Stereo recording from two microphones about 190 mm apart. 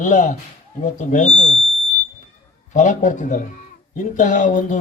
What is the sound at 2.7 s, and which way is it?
A man's voice, 40° left (ahead or behind).